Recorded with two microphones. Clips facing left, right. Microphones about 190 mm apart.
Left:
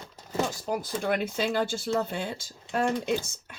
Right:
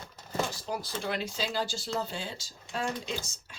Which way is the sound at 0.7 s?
50° left (ahead or behind).